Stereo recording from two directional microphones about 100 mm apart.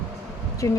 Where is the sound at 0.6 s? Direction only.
30° left (ahead or behind).